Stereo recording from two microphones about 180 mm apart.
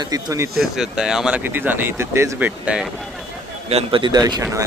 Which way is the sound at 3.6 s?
30° right (ahead or behind).